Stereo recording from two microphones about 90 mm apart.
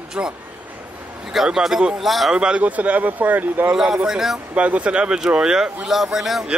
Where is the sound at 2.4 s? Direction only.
10° right (ahead or behind).